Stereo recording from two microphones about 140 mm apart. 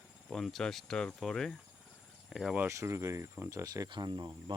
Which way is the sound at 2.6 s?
20° right (ahead or behind).